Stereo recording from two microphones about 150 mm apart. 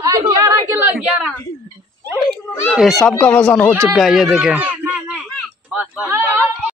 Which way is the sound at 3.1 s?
10° left (ahead or behind).